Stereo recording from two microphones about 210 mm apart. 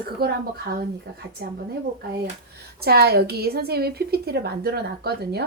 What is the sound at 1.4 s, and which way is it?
Speech, 50° right (ahead or behind).